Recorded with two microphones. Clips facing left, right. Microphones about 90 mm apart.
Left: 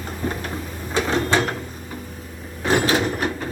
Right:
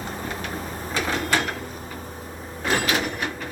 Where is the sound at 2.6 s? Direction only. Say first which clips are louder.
Left 5 dB; 30° left (ahead or behind).